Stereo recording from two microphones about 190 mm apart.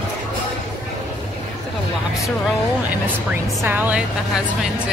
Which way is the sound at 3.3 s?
10° right (ahead or behind).